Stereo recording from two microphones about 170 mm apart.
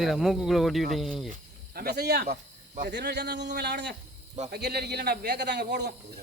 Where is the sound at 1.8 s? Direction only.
70° right (ahead or behind).